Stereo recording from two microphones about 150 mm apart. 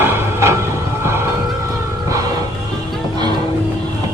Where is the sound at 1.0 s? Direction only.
15° right (ahead or behind).